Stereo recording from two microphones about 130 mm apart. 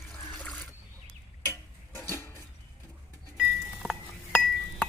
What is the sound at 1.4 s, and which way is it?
Tick-tock, 20° left (ahead or behind).